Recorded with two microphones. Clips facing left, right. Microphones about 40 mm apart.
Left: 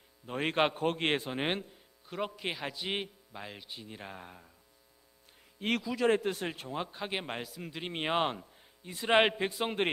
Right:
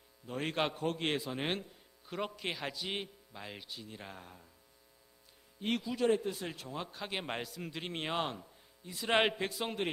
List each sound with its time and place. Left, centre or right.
0.3 s a man's voice: left
1.4 s speech: left
2.0 s speech: centre
2.7 s a man's voice: left
3.4 s a man's voice: centre
3.7 s speech: left
4.2 s speech: left
5.6 s speech: left
6.6 s speech: left
7.3 s a man's voice: centre
7.9 s speech: left
9.0 s speech: centre